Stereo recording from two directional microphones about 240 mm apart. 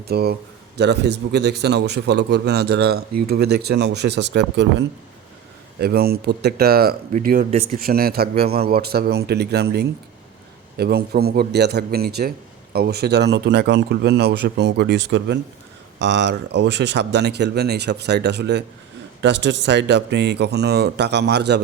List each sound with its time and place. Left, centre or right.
0.0 s a man's voice: right
5.8 s a man's voice: right